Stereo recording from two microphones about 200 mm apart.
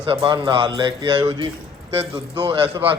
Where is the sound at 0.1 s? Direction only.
25° right (ahead or behind).